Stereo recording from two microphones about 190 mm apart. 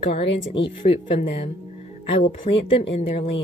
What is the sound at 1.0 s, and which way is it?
Speech, 30° left (ahead or behind).